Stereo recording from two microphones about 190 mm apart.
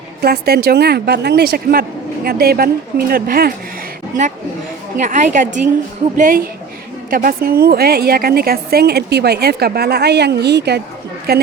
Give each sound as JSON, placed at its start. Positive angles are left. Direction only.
{"t": 0.2, "sound": "a woman's voice", "side_deg": -55}
{"t": 4.9, "sound": "a woman's voice", "side_deg": -40}